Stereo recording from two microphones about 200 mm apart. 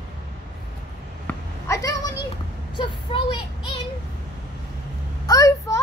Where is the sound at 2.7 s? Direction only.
25° left (ahead or behind).